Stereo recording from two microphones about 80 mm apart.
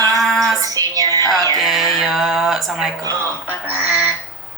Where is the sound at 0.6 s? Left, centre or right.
Right.